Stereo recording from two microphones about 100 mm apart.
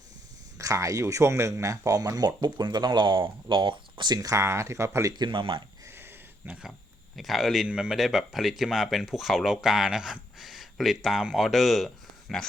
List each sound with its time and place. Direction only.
0.6 s speech: 35° right (ahead or behind)
5.1 s speech: 50° right (ahead or behind)
5.8 s a sound: 25° right (ahead or behind)
7.2 s speech: centre (ahead or behind)